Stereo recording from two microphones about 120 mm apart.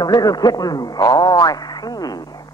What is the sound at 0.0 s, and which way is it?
Speech, 35° left (ahead or behind).